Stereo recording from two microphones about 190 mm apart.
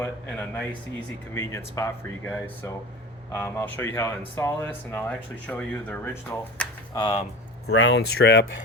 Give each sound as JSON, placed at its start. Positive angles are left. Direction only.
{"t": 0.0, "sound": "speech", "side_deg": 10}
{"t": 7.7, "sound": "speech", "side_deg": 65}